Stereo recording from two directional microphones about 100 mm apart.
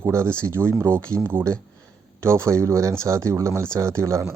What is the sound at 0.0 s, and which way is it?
Speech, 25° right (ahead or behind).